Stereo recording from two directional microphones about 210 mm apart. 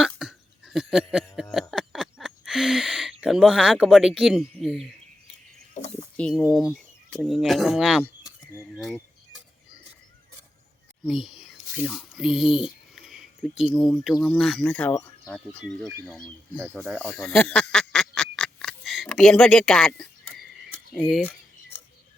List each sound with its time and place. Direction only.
0.0 s hiccup: 5° right (ahead or behind)
1.7 s a sound: centre (ahead or behind)
5.7 s a sound: 30° left (ahead or behind)
6.1 s speech: 5° left (ahead or behind)
11.0 s speech: centre (ahead or behind)
12.6 s a sound: centre (ahead or behind)
13.6 s speech: centre (ahead or behind)
16.6 s speech: 10° right (ahead or behind)
17.0 s duck: 5° left (ahead or behind)
20.9 s cutlery: centre (ahead or behind)